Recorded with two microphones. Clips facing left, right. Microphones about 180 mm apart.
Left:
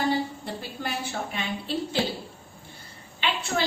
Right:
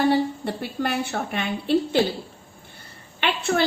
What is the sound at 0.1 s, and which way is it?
A woman's voice, 60° right (ahead or behind).